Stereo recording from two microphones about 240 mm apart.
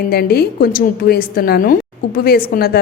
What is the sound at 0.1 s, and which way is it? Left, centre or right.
A woman's voice, left.